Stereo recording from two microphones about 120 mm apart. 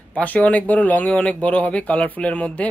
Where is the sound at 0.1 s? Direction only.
10° left (ahead or behind).